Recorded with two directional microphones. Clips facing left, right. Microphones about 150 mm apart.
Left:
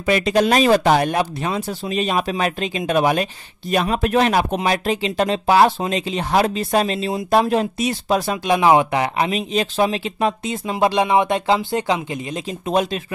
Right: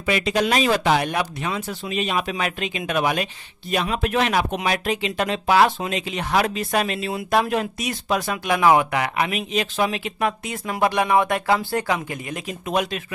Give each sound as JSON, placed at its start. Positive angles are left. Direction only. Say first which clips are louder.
{"t": 0.0, "sound": "speech", "louder": "left 4 dB", "side_deg": 40}